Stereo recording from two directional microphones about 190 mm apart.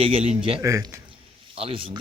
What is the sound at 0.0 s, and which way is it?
Speech, 30° right (ahead or behind).